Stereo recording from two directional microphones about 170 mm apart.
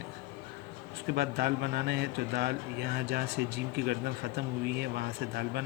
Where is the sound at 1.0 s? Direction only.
75° right (ahead or behind).